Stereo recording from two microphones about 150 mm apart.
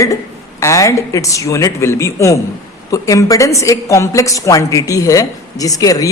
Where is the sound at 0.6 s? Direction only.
20° left (ahead or behind).